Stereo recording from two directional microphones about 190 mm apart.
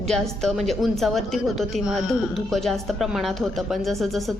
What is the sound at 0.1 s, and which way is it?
A woman's voice, centre (ahead or behind).